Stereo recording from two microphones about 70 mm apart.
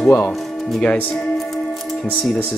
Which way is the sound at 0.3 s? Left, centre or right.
Centre.